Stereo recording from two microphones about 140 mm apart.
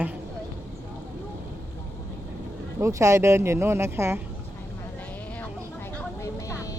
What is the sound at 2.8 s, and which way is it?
Speech, 20° right (ahead or behind).